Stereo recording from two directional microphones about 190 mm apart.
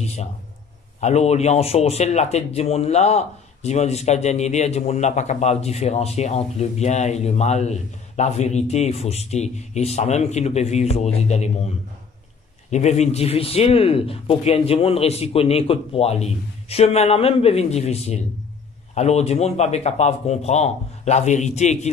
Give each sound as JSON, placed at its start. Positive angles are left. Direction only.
{"t": 0.0, "sound": "a man's voice", "side_deg": 35}
{"t": 12.7, "sound": "speech", "side_deg": 35}